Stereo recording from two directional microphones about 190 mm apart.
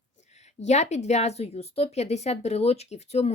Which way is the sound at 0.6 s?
35° left (ahead or behind).